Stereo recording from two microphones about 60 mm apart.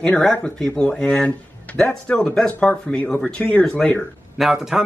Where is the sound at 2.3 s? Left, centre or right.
Centre.